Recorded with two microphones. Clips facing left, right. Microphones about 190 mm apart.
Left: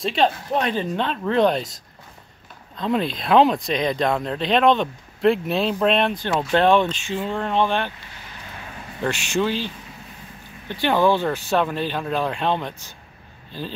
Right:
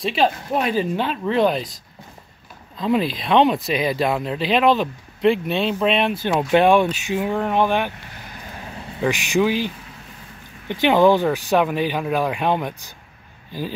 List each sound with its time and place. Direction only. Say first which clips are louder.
0.0 s speech: right 1 dB; 5° right (ahead or behind)
2.8 s speech: right 2 dB; centre (ahead or behind)
6.2 s speech: right 4 dB; 15° right (ahead or behind)
9.0 s speech: right 4 dB; 15° right (ahead or behind)
10.7 s speech: right 4 dB; 15° right (ahead or behind)